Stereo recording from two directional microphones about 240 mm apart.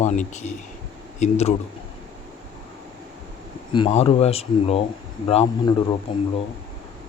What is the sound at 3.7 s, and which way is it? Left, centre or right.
Speech, left.